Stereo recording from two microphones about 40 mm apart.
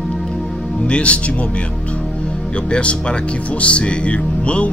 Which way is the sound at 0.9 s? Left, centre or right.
Left.